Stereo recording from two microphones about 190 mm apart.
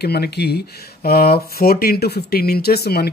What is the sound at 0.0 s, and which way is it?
Speech, 55° left (ahead or behind).